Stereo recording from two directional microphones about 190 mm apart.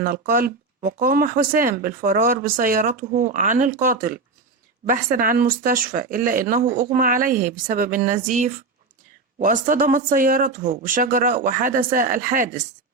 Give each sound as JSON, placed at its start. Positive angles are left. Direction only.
{"t": 0.0, "sound": "speech", "side_deg": -50}